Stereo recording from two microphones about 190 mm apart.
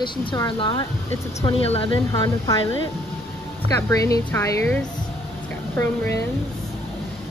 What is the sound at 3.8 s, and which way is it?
Speech, 15° left (ahead or behind).